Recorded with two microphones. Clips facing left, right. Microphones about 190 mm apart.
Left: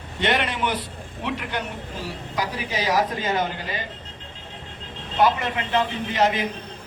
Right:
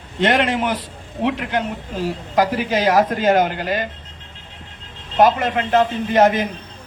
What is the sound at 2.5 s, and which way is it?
Speech, 90° right.